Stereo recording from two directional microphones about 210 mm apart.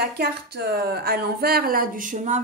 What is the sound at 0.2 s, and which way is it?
Speech, 50° right (ahead or behind).